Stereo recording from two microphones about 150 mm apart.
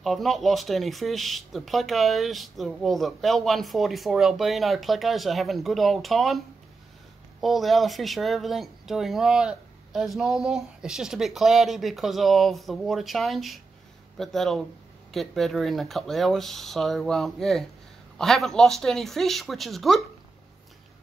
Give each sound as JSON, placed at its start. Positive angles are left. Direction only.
{"t": 0.0, "sound": "speech", "side_deg": 0}